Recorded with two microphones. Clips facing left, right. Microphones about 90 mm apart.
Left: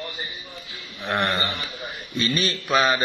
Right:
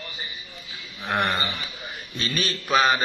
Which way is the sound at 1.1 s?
Centre (ahead or behind).